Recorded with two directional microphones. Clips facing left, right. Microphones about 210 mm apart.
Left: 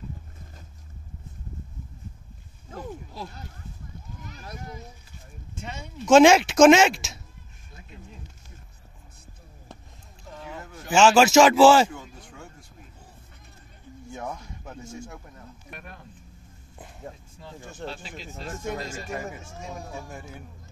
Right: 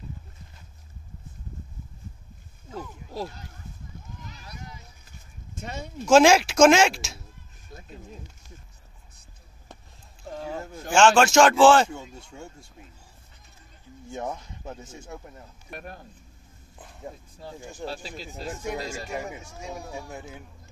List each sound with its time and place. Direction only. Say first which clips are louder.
4.3 s a sound: left 6 dB; 50° left (ahead or behind)
5.5 s speech: right 3 dB; 40° right (ahead or behind)
6.0 s speech: left 2 dB; centre (ahead or behind)
10.4 s a sound: right 5 dB; 30° right (ahead or behind)
10.9 s speech: left 1 dB; 5° left (ahead or behind)
11.9 s a sound: right 2 dB; 25° right (ahead or behind)
14.1 s speech: right 3 dB; 25° right (ahead or behind)
15.7 s speech: right 6 dB; 40° right (ahead or behind)
17.6 s speech: left 1 dB; 10° right (ahead or behind)
17.8 s speech: right 2 dB; 35° right (ahead or behind)
18.3 s speech: even; 15° right (ahead or behind)